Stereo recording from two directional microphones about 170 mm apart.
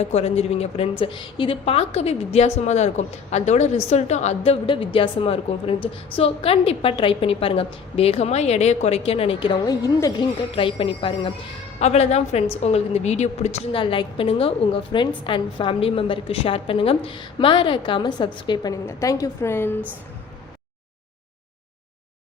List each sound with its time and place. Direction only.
0.0 s a woman's voice: 40° left (ahead or behind); by 19.8 s 15° left (ahead or behind)